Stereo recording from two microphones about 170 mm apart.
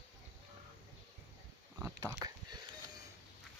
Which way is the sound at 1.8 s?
20° right (ahead or behind).